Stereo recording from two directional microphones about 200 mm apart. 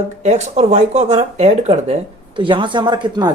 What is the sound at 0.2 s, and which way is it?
Speech, 35° right (ahead or behind).